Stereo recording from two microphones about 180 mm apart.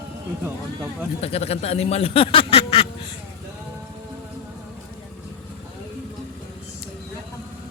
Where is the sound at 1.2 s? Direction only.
35° left (ahead or behind).